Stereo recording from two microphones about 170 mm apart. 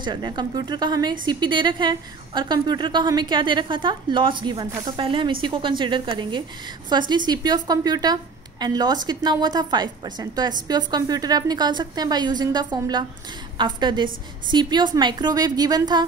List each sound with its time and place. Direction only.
0.0 s a woman's voice: 25° right (ahead or behind)